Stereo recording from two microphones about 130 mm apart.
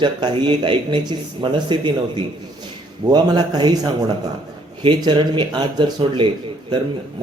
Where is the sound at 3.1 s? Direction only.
35° right (ahead or behind).